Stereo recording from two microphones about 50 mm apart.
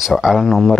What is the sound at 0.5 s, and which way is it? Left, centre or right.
Speech, centre.